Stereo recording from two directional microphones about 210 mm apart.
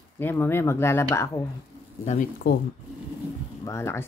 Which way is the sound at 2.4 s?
50° left (ahead or behind).